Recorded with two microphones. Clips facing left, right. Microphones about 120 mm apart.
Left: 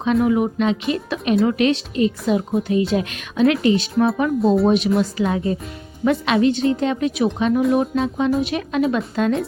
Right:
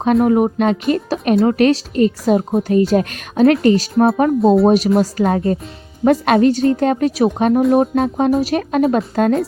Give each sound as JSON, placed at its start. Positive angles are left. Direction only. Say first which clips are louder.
{"t": 0.0, "sound": "a woman's voice", "louder": "right 4 dB", "side_deg": -50}
{"t": 4.4, "sound": "speech", "louder": "right 4 dB", "side_deg": 0}
{"t": 4.6, "sound": "a woman's voice", "louder": "right 4 dB", "side_deg": -40}